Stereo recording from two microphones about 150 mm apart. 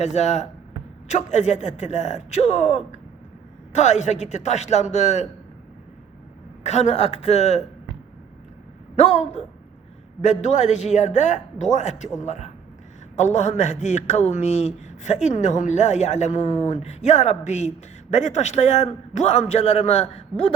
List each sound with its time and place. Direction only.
0.0 s speech: 50° left (ahead or behind)
6.6 s speech: 50° left (ahead or behind)
9.0 s speech: 45° left (ahead or behind)